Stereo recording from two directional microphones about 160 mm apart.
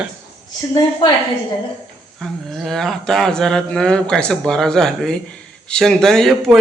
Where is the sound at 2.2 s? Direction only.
Centre (ahead or behind).